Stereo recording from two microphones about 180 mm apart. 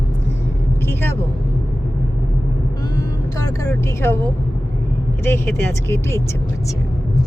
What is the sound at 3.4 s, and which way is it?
Speech, 15° left (ahead or behind).